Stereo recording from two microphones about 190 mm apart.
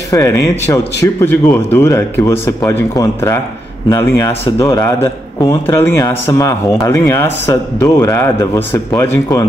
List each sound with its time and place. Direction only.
0.1 s a man's voice: 15° left (ahead or behind)